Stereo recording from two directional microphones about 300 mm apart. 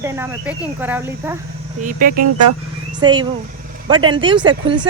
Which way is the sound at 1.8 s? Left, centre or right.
Right.